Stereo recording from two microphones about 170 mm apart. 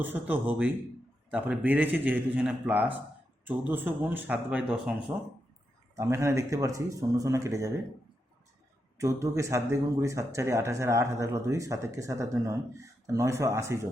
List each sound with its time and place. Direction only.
0.0 s speech: 10° right (ahead or behind)
6.0 s speech: 15° right (ahead or behind)
9.0 s speech: 20° right (ahead or behind)